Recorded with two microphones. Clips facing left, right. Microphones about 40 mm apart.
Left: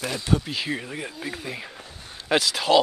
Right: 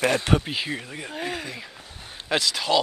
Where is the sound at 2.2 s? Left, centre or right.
Centre.